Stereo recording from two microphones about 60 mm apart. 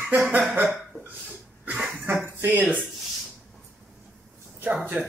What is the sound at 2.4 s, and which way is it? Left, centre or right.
Speech, right.